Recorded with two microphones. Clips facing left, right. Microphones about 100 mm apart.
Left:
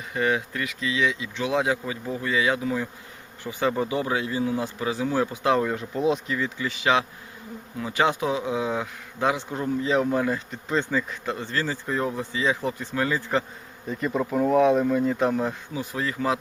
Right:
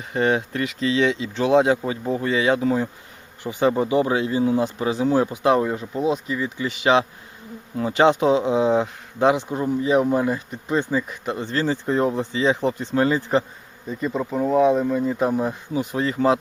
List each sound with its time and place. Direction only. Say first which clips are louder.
0.1 s speech: right 4 dB; 30° right (ahead or behind)
3.4 s speech: right 5 dB; 20° right (ahead or behind)
6.0 s speech: right 1 dB; centre (ahead or behind)
6.3 s speech: right 2 dB; 20° right (ahead or behind)
13.9 s speech: right 1 dB; 5° right (ahead or behind)
15.7 s speech: right 6 dB; 25° right (ahead or behind)